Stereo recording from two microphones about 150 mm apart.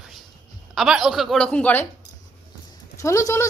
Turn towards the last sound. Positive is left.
turn(degrees=20)  # may be behind; listen again after turning